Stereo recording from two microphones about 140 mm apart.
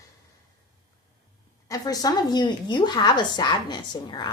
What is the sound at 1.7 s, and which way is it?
A woman's voice, 25° left (ahead or behind).